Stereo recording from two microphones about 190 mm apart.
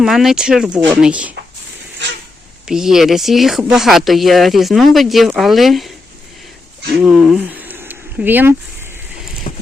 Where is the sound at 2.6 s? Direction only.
5° right (ahead or behind).